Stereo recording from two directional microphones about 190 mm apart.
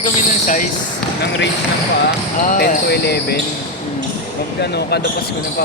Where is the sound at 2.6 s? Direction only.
55° left (ahead or behind).